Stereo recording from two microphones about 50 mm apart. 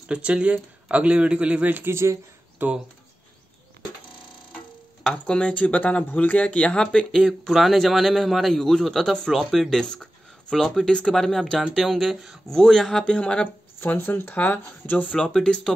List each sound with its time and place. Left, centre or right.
0.1 s speech: right
1.9 s speech: right
2.6 s speech: right
5.1 s speech: left
7.1 s a man's voice: centre
10.9 s speech: centre
11.1 s a man's voice: centre
13.0 s speech: centre
13.7 s speech: left
14.3 s speech: left
15.1 s speech: centre